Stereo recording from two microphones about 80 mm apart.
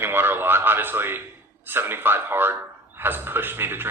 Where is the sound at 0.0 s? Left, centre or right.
Right.